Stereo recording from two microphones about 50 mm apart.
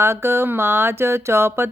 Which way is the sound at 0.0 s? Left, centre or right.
Right.